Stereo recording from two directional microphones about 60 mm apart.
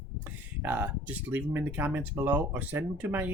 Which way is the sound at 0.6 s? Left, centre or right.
Right.